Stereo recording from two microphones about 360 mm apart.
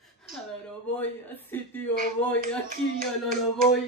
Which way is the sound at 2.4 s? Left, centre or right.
Right.